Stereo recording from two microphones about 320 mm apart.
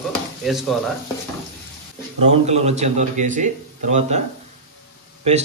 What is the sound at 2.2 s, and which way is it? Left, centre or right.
Speech, centre.